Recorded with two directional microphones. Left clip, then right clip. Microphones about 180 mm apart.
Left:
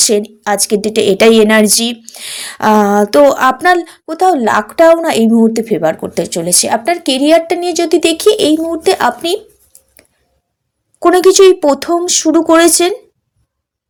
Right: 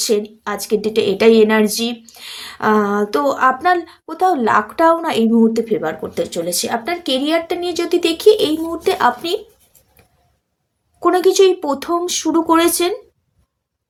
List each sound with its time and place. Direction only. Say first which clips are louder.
0.0 s a woman's voice: left 6 dB; 40° left (ahead or behind)
11.0 s a woman's voice: left 6 dB; 35° left (ahead or behind)